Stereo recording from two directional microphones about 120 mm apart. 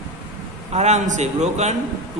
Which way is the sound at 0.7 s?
70° right (ahead or behind).